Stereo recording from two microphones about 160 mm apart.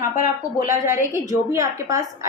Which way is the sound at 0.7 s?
15° right (ahead or behind).